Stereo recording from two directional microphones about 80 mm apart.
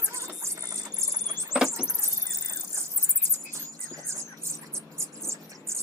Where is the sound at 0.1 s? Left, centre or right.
Right.